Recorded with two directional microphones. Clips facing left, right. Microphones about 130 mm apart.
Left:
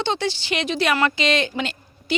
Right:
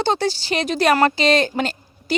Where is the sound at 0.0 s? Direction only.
40° right (ahead or behind).